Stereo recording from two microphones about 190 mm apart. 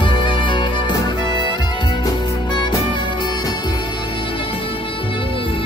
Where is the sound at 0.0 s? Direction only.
25° left (ahead or behind).